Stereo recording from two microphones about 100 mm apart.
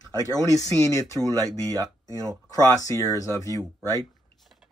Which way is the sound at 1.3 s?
35° right (ahead or behind).